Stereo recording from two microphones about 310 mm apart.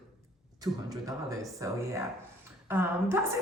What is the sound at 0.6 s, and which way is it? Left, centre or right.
A woman's voice, centre.